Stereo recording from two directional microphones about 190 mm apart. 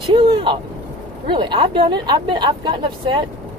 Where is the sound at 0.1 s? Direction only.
25° right (ahead or behind).